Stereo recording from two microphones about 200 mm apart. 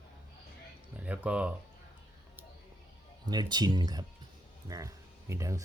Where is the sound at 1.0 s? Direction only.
5° right (ahead or behind).